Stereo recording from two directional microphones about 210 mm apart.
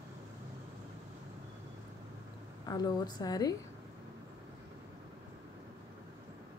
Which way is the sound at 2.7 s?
20° left (ahead or behind).